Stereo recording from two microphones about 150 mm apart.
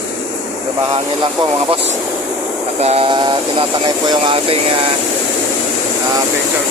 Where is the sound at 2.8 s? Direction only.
40° right (ahead or behind).